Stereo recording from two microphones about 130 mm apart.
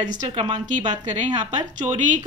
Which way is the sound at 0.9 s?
70° right (ahead or behind).